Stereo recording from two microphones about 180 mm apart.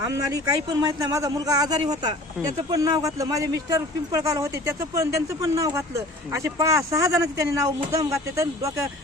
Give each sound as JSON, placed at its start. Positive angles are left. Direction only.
{"t": 0.0, "sound": "speech", "side_deg": -20}